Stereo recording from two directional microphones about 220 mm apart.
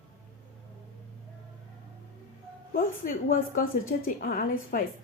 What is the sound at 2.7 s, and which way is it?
A woman's voice, 40° left (ahead or behind).